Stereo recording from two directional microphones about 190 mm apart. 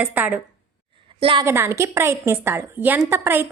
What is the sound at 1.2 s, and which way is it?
Speech, 30° right (ahead or behind).